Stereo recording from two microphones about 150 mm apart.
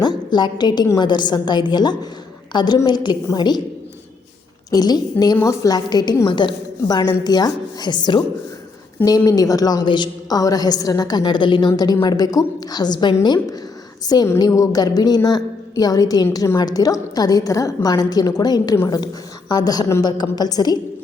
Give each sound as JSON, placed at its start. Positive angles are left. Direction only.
{"t": 0.0, "sound": "a woman's voice", "side_deg": 30}
{"t": 4.7, "sound": "a woman's voice", "side_deg": 25}